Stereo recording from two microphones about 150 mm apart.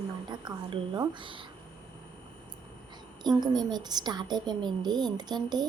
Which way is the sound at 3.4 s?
30° right (ahead or behind).